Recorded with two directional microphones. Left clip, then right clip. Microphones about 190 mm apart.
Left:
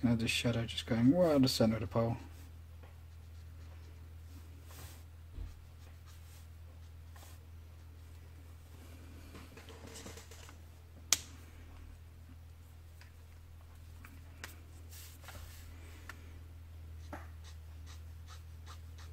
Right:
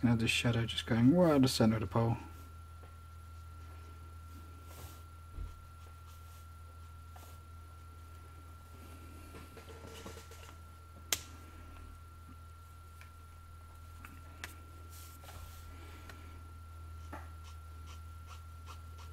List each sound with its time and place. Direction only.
0.0 s speech: 20° right (ahead or behind)